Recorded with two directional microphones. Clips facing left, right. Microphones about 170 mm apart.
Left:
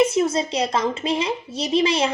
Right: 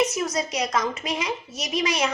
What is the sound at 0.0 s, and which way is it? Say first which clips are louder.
A woman's voice: left 6 dB; 30° left (ahead or behind).